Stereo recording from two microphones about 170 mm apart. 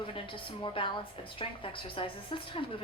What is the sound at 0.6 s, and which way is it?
A woman's voice, 30° left (ahead or behind).